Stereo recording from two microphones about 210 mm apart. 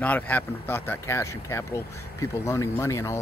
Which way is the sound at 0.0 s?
10° left (ahead or behind).